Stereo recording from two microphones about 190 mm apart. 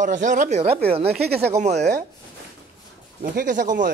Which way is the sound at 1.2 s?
55° right (ahead or behind).